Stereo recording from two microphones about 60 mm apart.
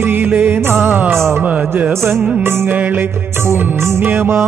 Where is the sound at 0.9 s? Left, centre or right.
Right.